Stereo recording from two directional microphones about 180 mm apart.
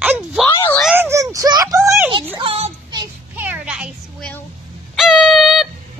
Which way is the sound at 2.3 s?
30° right (ahead or behind).